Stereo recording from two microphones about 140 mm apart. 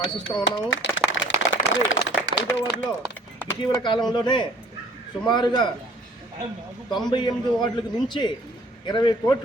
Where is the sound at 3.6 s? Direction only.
35° left (ahead or behind).